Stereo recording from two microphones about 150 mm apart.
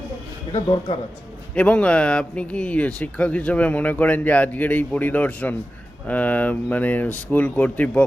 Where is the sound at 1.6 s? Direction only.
10° left (ahead or behind).